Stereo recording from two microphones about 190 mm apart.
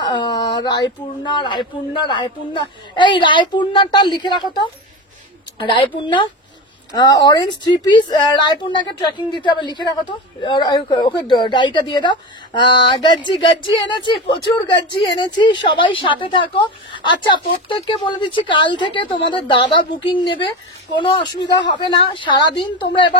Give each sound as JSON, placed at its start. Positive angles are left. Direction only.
{"t": 0.0, "sound": "a woman's voice", "side_deg": 20}
{"t": 5.6, "sound": "a woman's voice", "side_deg": 25}